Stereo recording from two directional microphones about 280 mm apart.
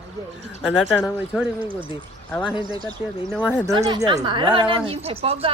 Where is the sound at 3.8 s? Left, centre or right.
Centre.